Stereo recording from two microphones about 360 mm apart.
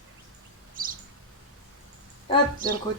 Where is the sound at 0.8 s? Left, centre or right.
Right.